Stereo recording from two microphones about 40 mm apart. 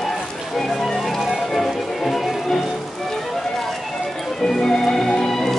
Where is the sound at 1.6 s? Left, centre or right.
Centre.